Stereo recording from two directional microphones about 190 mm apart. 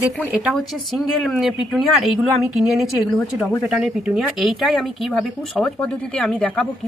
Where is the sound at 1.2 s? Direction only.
Centre (ahead or behind).